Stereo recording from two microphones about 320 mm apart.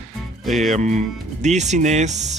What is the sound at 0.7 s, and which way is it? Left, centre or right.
Speech, right.